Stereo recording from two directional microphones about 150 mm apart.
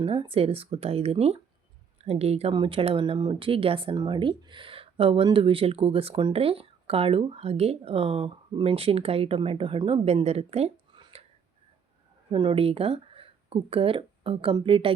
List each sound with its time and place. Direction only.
0.0 s speech: 40° right (ahead or behind)
11.0 s a sound: 40° right (ahead or behind)
12.3 s speech: 35° right (ahead or behind)